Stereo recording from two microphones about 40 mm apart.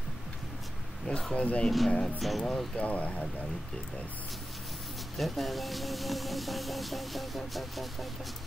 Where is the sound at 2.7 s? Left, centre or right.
Left.